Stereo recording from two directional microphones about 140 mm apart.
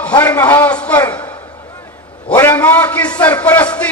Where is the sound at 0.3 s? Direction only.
15° left (ahead or behind).